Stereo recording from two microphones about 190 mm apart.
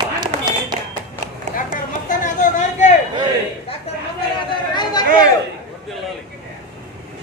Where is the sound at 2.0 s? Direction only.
40° left (ahead or behind).